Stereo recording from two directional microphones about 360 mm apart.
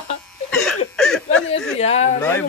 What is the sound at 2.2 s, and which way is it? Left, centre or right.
Speech, centre.